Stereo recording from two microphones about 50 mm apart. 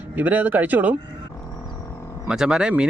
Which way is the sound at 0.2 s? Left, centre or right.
Right.